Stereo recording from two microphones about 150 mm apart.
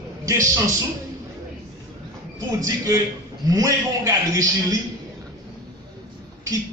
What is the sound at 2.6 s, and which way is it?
A man's voice, 20° right (ahead or behind).